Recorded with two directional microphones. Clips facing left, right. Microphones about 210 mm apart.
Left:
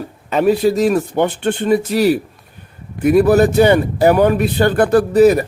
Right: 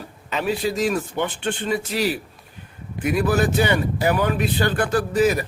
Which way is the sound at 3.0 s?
45° left (ahead or behind).